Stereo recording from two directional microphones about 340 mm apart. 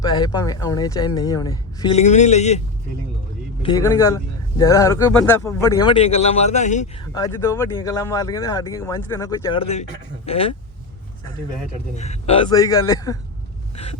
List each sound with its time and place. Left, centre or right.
0.0 s speech: centre
11.9 s speech: centre